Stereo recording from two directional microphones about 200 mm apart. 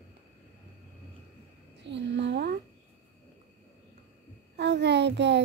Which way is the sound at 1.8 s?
60° right (ahead or behind).